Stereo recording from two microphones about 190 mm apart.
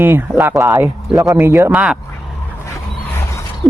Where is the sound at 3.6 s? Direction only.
10° left (ahead or behind).